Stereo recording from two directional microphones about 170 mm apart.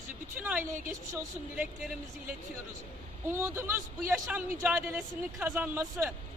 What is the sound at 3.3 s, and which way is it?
A man's voice, 15° right (ahead or behind).